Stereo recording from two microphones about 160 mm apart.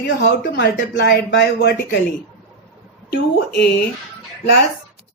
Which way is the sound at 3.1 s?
90° left.